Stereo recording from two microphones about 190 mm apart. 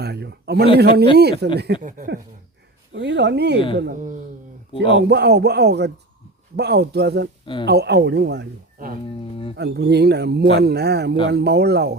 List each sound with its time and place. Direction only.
0.0 s a man's voice: 60° right (ahead or behind)
1.8 s speech: 45° right (ahead or behind)
2.9 s speech: 70° right (ahead or behind)
3.8 s speech: 50° right (ahead or behind)
4.9 s speech: 60° right (ahead or behind)
7.4 s speech: 25° left (ahead or behind)
7.7 s speech: 60° right (ahead or behind)